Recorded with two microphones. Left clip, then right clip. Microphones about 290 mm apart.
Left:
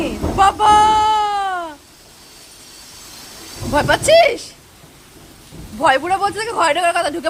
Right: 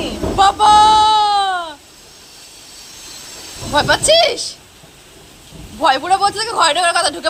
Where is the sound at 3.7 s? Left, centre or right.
Centre.